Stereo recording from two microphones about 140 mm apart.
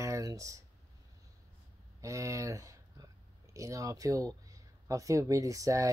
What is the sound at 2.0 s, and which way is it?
Speech, 20° right (ahead or behind).